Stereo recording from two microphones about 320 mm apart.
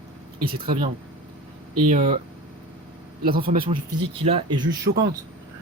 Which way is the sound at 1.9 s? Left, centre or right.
Right.